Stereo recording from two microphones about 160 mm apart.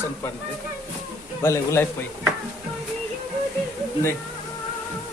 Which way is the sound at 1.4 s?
15° left (ahead or behind).